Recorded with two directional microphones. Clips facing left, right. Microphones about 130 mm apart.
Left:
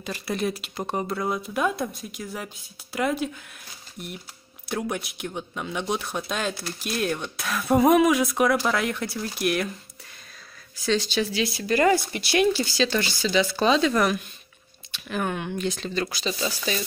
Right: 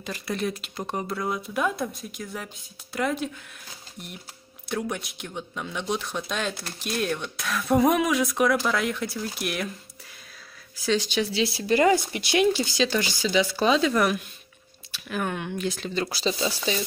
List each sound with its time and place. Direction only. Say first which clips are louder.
0.0 s speech: left 2 dB; 5° left (ahead or behind)
4.6 s speech: left 1 dB; 5° left (ahead or behind)
10.9 s speech: even; 15° right (ahead or behind)
11.3 s speech: right 2 dB; 30° right (ahead or behind); by 15.9 s 5° right (ahead or behind)
16.1 s speech: right 3 dB; 35° right (ahead or behind)
16.5 s speech: right 1 dB; 20° right (ahead or behind)